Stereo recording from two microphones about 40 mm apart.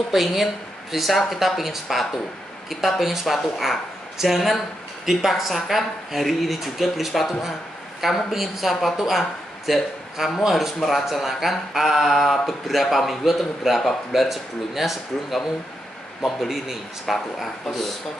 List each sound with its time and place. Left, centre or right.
0.1 s a man's voice: centre
16.2 s speech: centre
17.0 s speech: centre